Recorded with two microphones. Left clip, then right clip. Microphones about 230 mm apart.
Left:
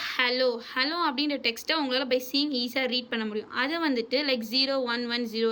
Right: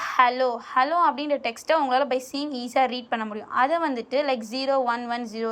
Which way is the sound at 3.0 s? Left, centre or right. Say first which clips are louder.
Right 3 dB; centre.